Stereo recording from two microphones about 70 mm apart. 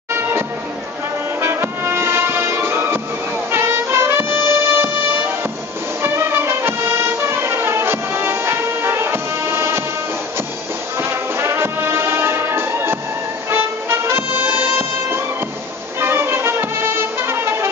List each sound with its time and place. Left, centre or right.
0.1 s music: right
6.0 s music: right
11.0 s music: right